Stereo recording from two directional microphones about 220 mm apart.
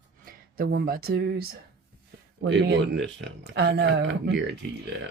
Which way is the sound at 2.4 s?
55° right (ahead or behind).